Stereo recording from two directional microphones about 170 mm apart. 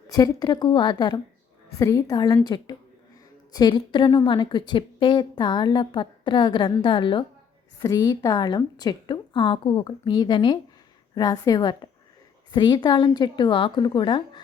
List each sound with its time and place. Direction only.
0.1 s a woman's voice: 20° left (ahead or behind)